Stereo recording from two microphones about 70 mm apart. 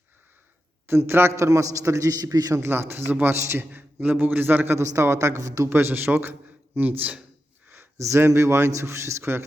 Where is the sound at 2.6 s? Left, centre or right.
Right.